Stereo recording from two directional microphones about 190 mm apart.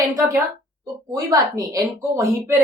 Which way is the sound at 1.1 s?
15° right (ahead or behind).